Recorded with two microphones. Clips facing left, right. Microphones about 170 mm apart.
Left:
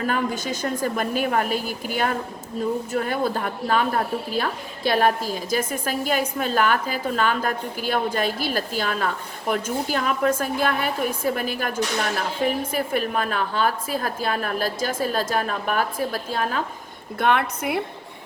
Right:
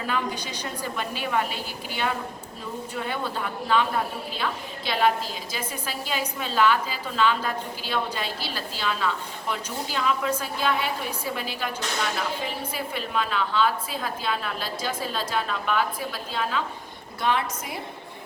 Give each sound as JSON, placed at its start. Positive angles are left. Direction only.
{"t": 0.1, "sound": "a woman's voice", "side_deg": 45}
{"t": 12.7, "sound": "a woman's voice", "side_deg": 50}
{"t": 17.2, "sound": "a woman's voice", "side_deg": 60}